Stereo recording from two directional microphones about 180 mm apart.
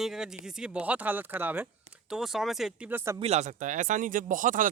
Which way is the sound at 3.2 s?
40° right (ahead or behind).